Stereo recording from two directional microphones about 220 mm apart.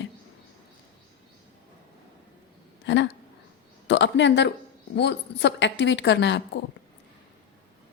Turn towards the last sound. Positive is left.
turn(degrees=55)  # may be behind; listen again after turning